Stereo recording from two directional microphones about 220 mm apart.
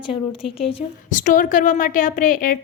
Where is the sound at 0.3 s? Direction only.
25° left (ahead or behind).